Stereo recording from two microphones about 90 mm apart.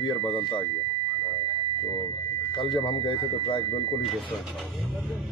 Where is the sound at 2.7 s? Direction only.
60° left (ahead or behind).